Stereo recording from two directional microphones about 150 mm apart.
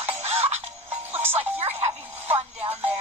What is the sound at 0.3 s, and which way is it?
Music, 40° right (ahead or behind).